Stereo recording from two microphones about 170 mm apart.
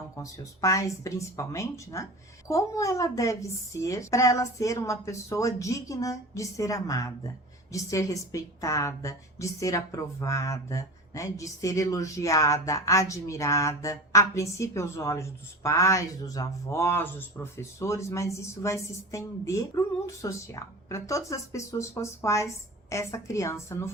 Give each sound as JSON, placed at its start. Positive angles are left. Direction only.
{"t": 0.2, "sound": "a woman's voice", "side_deg": 20}